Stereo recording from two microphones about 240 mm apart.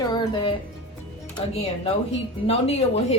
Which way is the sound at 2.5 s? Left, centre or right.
Left.